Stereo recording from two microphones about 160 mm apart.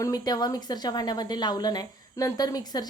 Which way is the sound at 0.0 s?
25° left (ahead or behind).